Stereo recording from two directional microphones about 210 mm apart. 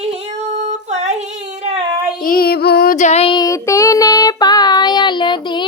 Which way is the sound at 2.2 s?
45° left (ahead or behind).